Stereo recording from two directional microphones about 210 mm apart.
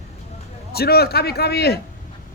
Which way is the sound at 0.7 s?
50° left (ahead or behind).